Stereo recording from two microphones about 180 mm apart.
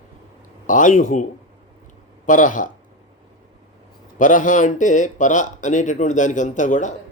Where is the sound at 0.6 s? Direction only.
45° left (ahead or behind).